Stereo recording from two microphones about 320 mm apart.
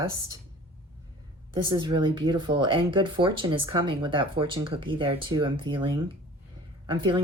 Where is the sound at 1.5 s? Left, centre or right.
Centre.